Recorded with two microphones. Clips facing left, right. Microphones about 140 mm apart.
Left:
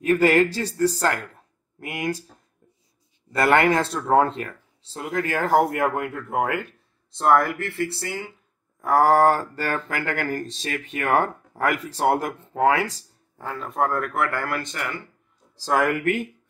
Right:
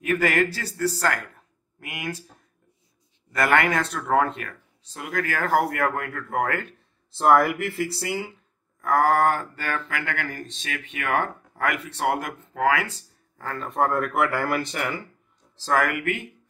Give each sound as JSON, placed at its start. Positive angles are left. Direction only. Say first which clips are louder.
{"t": 0.0, "sound": "speech", "louder": "left 5 dB", "side_deg": 30}
{"t": 3.3, "sound": "speech", "louder": "left 3 dB", "side_deg": 30}
{"t": 7.2, "sound": "speech", "louder": "right 1 dB", "side_deg": -5}
{"t": 8.8, "sound": "speech", "louder": "left 3 dB", "side_deg": 30}
{"t": 13.6, "sound": "speech", "louder": "right 1 dB", "side_deg": 0}
{"t": 15.5, "sound": "speech", "louder": "left 2 dB", "side_deg": 15}
{"t": 16.0, "sound": "speech", "louder": "left 5 dB", "side_deg": 40}